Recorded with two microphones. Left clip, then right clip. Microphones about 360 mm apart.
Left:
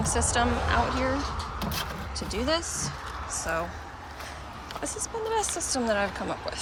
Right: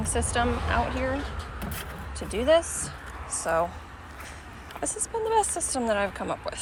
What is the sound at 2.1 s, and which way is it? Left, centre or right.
Speech, centre.